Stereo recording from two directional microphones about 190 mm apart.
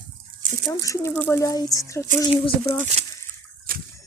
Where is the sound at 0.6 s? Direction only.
15° left (ahead or behind).